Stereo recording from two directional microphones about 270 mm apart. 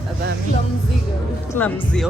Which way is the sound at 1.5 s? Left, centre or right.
Centre.